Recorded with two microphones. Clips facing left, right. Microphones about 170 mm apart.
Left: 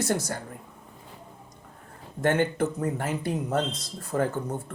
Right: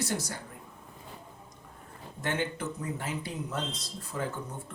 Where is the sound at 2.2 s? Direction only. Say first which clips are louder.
Left 9 dB; 50° left (ahead or behind).